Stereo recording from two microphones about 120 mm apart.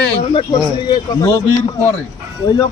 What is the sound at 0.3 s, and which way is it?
Speech, 40° left (ahead or behind).